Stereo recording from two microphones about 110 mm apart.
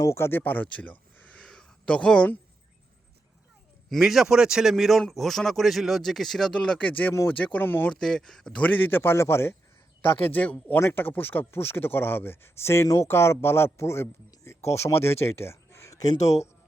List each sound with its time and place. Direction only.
0.0 s speech: 25° left (ahead or behind)
3.8 s a man's voice: centre (ahead or behind); by 7.1 s 15° left (ahead or behind)
7.1 s speech: 25° left (ahead or behind)
7.3 s a man's voice: 15° left (ahead or behind)
7.9 s a man's voice: 5° left (ahead or behind); by 16.1 s 30° left (ahead or behind)